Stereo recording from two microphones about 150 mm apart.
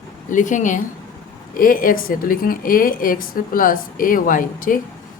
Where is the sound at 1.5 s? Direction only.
65° left (ahead or behind).